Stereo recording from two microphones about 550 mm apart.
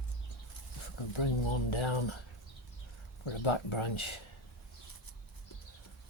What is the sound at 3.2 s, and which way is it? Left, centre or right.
Speech, left.